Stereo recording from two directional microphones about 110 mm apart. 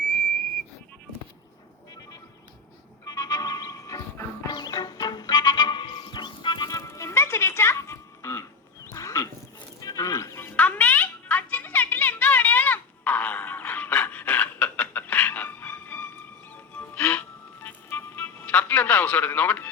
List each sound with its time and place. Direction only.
3.0 s music: 35° left (ahead or behind)
6.7 s music: 30° left (ahead or behind)
8.9 s a sound: 30° left (ahead or behind)
9.8 s music: 35° left (ahead or behind)
10.6 s a sound: 15° left (ahead or behind)
16.9 s music: 20° left (ahead or behind)